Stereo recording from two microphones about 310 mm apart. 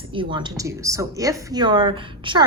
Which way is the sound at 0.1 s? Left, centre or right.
Centre.